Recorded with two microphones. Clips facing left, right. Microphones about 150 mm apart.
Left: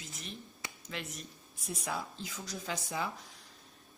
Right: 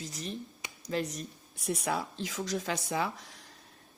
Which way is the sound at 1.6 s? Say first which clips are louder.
Right 6 dB; 70° right (ahead or behind).